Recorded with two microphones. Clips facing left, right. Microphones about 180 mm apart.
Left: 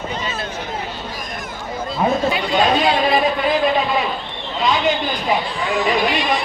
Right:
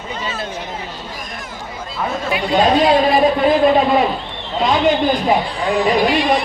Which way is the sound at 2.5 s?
30° right (ahead or behind).